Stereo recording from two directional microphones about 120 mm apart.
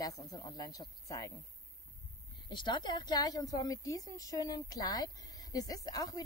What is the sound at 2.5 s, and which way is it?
A woman's voice, 40° left (ahead or behind).